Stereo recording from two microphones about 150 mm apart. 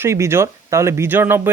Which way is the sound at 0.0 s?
15° right (ahead or behind).